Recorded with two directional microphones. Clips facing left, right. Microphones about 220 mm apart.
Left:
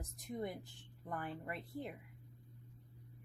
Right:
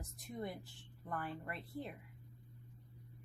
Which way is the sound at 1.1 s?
15° left (ahead or behind).